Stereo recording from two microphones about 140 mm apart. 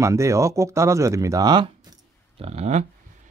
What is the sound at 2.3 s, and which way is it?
Speech, 50° right (ahead or behind).